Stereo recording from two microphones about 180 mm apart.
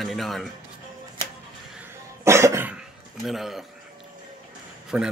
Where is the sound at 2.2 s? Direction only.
15° right (ahead or behind).